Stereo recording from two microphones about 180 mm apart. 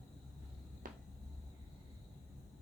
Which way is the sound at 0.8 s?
50° right (ahead or behind).